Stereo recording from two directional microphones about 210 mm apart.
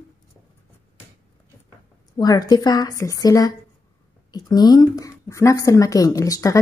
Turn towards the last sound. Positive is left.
turn(degrees=15)  # may be behind; listen again after turning